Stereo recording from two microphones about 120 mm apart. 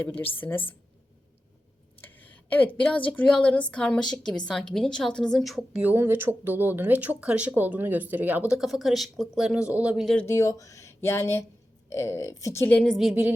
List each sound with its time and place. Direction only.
0.0 s a woman's voice: 15° left (ahead or behind)
2.0 s a woman's voice: 15° left (ahead or behind); by 5.8 s centre (ahead or behind)
5.8 s speech: 15° right (ahead or behind)
8.5 s speech: centre (ahead or behind)
10.2 s speech: 25° left (ahead or behind)
12.6 s speech: 10° left (ahead or behind); by 13.3 s 5° right (ahead or behind)